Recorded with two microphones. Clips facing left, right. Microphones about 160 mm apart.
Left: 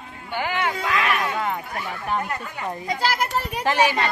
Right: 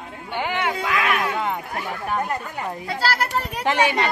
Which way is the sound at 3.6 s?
15° right (ahead or behind).